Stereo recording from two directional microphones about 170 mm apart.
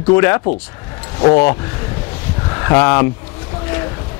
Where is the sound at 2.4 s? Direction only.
20° left (ahead or behind).